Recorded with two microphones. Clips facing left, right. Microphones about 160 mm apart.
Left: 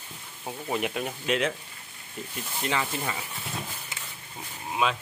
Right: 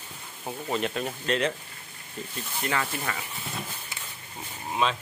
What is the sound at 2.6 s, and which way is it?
Speech, 15° left (ahead or behind).